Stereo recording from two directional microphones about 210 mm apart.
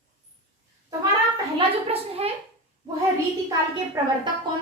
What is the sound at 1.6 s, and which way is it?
Speech, 30° right (ahead or behind).